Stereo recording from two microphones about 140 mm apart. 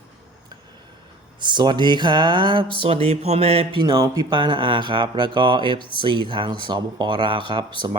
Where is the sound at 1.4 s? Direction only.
30° right (ahead or behind).